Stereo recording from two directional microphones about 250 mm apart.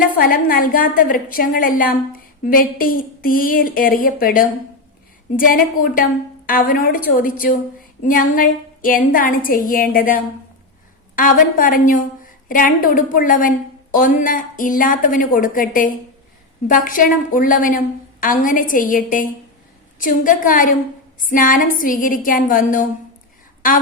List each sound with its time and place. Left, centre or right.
0.2 s a woman's voice: left